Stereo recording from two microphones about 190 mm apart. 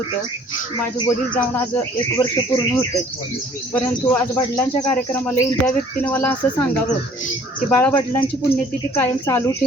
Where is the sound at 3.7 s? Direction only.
10° left (ahead or behind).